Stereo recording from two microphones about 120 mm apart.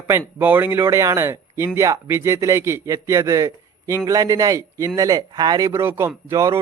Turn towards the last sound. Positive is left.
turn(degrees=-30)  # may be behind; listen again after turning